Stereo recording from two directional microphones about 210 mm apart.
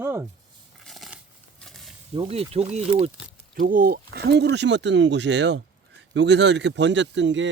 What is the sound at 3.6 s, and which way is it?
Speech, 40° right (ahead or behind).